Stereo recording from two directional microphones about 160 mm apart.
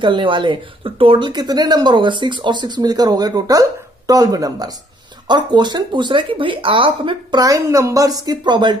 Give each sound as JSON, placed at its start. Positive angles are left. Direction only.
{"t": 0.0, "sound": "speech", "side_deg": -30}